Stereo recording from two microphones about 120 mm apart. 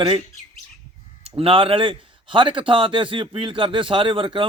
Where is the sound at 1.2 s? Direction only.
50° right (ahead or behind).